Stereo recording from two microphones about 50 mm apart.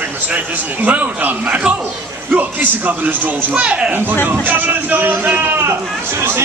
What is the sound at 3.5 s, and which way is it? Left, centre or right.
Speech, centre.